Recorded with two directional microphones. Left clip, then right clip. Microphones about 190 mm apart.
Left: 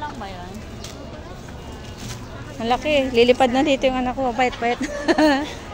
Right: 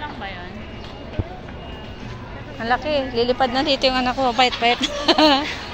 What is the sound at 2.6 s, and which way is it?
Speech, 40° left (ahead or behind).